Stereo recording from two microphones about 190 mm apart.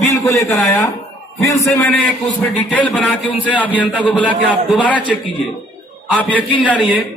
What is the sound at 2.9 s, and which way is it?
Speech, centre (ahead or behind).